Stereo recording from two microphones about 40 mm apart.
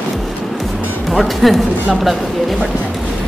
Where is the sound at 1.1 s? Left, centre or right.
Centre.